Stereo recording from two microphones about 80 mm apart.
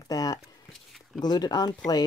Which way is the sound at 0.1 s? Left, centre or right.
Left.